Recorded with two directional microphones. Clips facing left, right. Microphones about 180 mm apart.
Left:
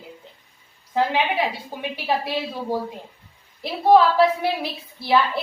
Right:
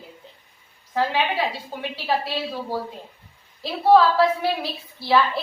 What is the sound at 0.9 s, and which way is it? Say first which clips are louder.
A woman's voice: left 1 dB; 20° left (ahead or behind).